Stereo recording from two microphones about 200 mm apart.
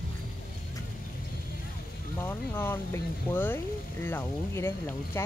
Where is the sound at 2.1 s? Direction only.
10° left (ahead or behind).